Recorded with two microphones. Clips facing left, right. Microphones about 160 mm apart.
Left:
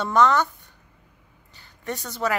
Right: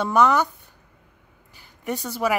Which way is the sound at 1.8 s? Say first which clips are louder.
Right 3 dB; 10° right (ahead or behind).